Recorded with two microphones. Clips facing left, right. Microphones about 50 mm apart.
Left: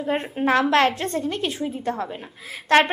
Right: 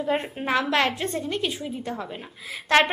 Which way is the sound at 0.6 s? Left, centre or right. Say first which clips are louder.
Left 4 dB; left.